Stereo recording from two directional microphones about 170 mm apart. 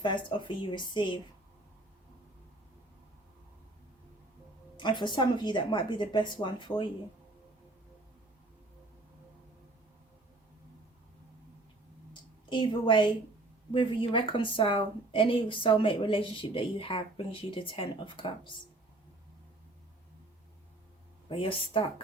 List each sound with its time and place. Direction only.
0.0 s speech: 30° left (ahead or behind)
4.8 s speech: 25° left (ahead or behind)
12.5 s a woman's voice: 30° left (ahead or behind)
21.2 s a woman's voice: 30° left (ahead or behind)